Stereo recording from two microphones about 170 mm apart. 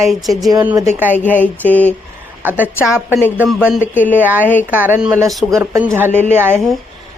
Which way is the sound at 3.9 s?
10° left (ahead or behind).